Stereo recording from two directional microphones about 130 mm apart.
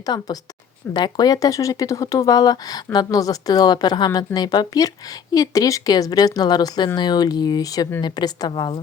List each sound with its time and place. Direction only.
0.0 s speech: 30° left (ahead or behind)